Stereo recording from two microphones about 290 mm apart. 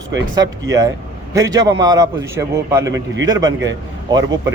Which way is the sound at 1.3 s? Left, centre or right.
Centre.